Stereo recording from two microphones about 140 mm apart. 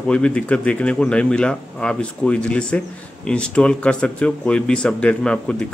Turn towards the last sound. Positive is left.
turn(degrees=5)  # may be behind; listen again after turning